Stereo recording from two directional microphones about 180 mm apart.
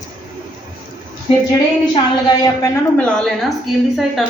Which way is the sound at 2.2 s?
20° left (ahead or behind).